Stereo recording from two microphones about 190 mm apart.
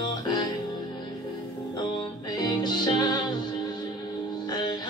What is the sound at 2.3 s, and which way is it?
Music, 20° left (ahead or behind).